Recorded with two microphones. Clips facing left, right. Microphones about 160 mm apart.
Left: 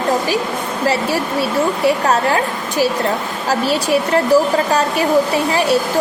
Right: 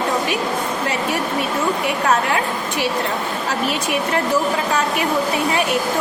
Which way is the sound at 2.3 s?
40° left (ahead or behind).